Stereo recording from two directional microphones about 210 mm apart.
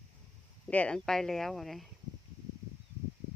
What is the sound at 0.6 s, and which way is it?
Speech, 5° left (ahead or behind).